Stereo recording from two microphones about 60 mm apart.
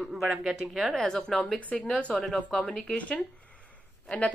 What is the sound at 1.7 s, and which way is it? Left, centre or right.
Speech, centre.